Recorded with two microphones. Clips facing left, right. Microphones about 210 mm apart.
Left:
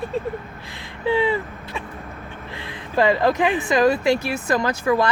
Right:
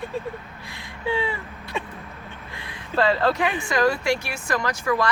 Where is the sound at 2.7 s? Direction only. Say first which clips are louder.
Left 3 dB; 15° left (ahead or behind).